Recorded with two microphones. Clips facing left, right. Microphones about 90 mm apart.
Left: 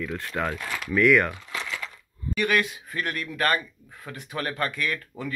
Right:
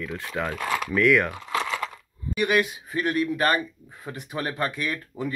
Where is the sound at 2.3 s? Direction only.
15° right (ahead or behind).